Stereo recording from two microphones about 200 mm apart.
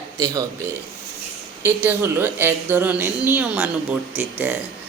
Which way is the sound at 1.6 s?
10° right (ahead or behind).